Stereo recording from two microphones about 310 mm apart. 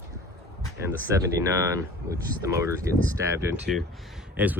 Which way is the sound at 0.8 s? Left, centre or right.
Centre.